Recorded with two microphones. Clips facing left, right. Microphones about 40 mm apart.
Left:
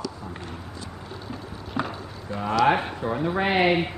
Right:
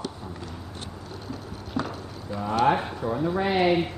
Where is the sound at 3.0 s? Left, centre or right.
Left.